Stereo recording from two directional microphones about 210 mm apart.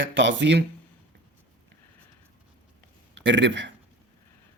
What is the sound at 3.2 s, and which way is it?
Speech, 60° right (ahead or behind).